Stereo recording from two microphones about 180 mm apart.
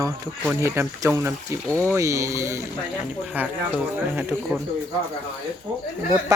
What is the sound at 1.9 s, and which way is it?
Speech, 15° right (ahead or behind).